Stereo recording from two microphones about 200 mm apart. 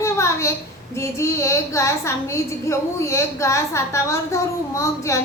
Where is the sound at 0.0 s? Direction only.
15° left (ahead or behind).